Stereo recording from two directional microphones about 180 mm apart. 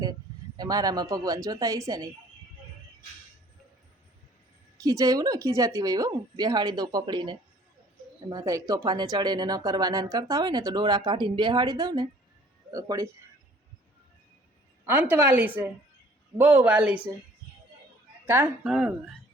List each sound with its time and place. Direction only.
0.5 s speech: 20° right (ahead or behind)
4.8 s a woman's voice: 20° right (ahead or behind)
14.8 s a woman's voice: 10° right (ahead or behind)
18.3 s a woman's voice: 10° right (ahead or behind)